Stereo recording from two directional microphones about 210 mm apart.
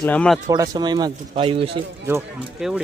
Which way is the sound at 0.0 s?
5° left (ahead or behind).